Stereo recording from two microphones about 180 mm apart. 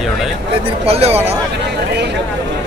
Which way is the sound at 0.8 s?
35° right (ahead or behind).